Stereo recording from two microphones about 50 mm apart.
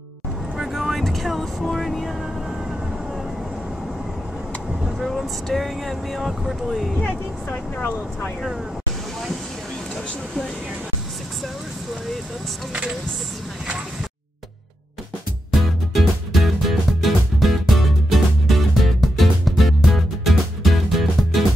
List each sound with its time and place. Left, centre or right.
0.6 s vehicle: centre
4.8 s speech: centre
15.9 s music: centre